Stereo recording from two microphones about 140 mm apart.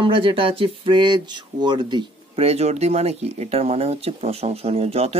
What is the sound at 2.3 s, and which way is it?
Speech, 45° right (ahead or behind).